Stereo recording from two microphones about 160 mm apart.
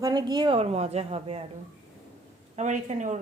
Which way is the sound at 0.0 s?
25° right (ahead or behind).